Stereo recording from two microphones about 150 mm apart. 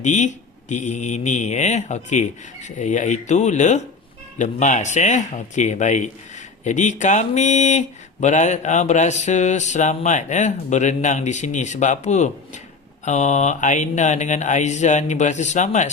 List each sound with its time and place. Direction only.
0.0 s speech: 55° left (ahead or behind)